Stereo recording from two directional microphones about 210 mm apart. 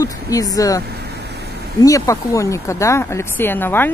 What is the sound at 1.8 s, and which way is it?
Speech, 15° left (ahead or behind).